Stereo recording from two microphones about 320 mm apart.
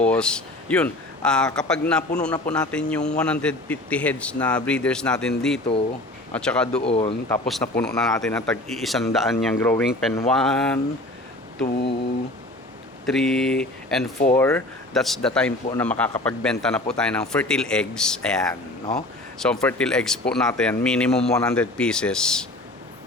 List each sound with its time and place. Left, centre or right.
0.0 s a man's voice: centre
6.8 s speech: centre
7.3 s a man's voice: centre
13.1 s a man's voice: centre